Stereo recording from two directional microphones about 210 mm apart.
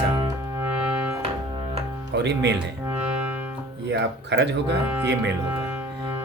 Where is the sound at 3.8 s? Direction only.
55° right (ahead or behind).